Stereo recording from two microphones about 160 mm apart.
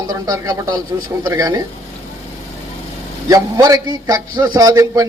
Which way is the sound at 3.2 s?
20° right (ahead or behind).